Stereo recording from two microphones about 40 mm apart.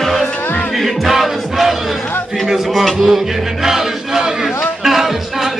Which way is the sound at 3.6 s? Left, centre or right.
Centre.